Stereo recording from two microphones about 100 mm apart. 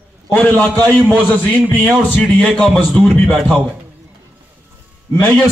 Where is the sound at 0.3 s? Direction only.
15° left (ahead or behind).